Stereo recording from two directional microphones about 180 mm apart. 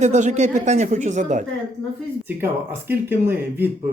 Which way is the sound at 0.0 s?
40° right (ahead or behind).